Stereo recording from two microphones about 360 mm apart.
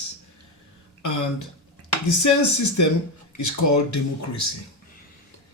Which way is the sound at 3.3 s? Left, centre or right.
Left.